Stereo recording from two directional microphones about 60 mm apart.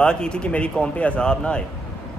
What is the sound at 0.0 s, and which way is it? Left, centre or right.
Speech, centre.